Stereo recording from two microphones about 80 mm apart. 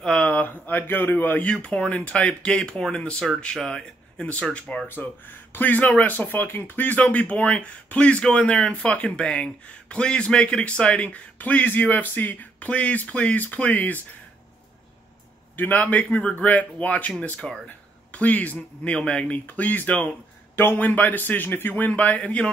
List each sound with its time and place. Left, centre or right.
0.0 s speech: centre
1.5 s speech: centre
4.8 s speech: left
15.5 s speech: left